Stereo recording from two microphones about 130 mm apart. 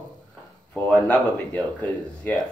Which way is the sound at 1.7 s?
10° left (ahead or behind).